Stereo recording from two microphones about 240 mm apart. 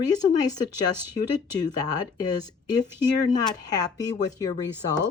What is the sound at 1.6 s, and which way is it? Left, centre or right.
Speech, centre.